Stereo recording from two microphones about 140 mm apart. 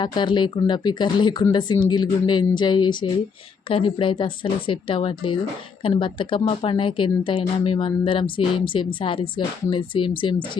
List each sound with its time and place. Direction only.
0.0 s speech: 35° left (ahead or behind)